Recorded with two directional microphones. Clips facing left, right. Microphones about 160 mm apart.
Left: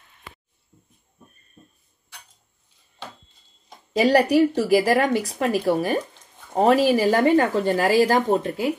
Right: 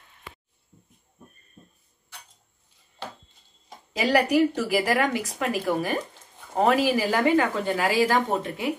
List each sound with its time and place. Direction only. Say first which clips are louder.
3.9 s speech: left 4 dB; 40° left (ahead or behind)